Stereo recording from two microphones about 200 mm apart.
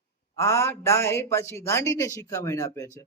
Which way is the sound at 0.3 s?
15° left (ahead or behind).